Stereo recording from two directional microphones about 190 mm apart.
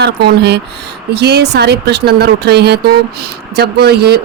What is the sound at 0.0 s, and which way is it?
Speech, 60° right (ahead or behind).